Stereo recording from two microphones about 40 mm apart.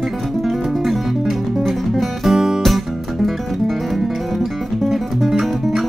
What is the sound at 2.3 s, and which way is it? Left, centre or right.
Music, centre.